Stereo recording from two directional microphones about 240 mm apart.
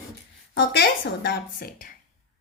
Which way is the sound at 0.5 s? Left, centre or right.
Left.